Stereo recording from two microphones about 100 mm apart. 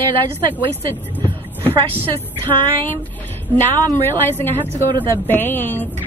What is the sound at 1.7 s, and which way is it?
Speech, 65° right (ahead or behind).